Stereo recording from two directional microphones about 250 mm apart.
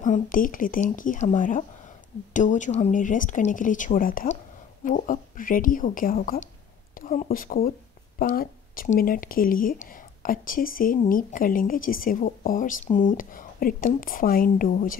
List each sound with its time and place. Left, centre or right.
0.0 s speech: left